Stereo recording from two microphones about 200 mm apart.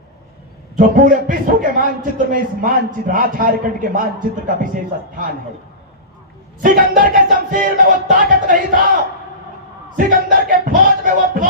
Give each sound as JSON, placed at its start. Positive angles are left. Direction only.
{"t": 0.8, "sound": "a man's voice", "side_deg": -40}
{"t": 6.6, "sound": "a man's voice", "side_deg": -45}
{"t": 10.1, "sound": "a man's voice", "side_deg": -45}